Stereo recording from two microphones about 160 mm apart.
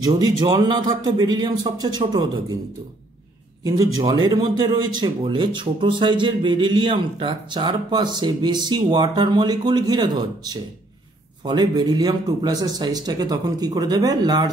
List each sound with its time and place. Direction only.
0.0 s speech: 25° right (ahead or behind)
3.6 s speech: 25° right (ahead or behind)